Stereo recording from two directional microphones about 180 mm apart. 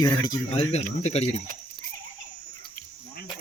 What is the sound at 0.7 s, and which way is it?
Speech, 35° left (ahead or behind).